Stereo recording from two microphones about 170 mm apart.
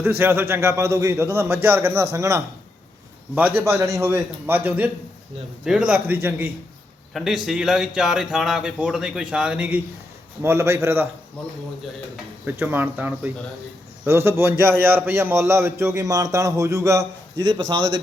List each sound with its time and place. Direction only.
0.0 s a man's voice: 15° right (ahead or behind)
7.1 s a man's voice: centre (ahead or behind)
12.5 s a man's voice: 10° right (ahead or behind)